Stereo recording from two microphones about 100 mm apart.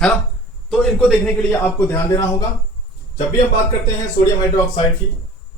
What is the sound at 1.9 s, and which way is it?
Speech, 30° left (ahead or behind).